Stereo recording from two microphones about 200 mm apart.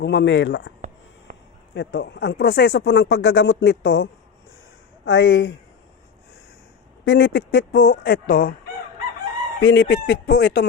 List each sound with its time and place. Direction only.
0.0 s speech: 60° left (ahead or behind)
1.3 s a sound: 40° right (ahead or behind)
1.7 s speech: 60° left (ahead or behind)
7.0 s speech: 60° left (ahead or behind)
9.6 s speech: 75° left (ahead or behind)
10.2 s speech: 50° left (ahead or behind)